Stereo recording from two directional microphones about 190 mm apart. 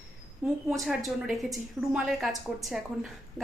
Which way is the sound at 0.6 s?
Centre (ahead or behind).